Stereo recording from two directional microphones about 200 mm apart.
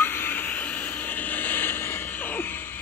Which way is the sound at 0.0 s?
10° left (ahead or behind).